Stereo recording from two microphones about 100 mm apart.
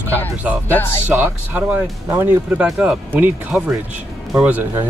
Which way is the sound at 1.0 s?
15° right (ahead or behind).